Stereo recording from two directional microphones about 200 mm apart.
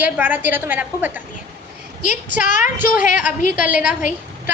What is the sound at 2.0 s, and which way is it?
Speech, 40° left (ahead or behind).